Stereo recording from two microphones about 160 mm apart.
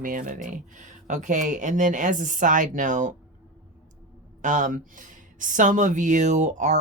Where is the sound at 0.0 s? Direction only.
60° right (ahead or behind).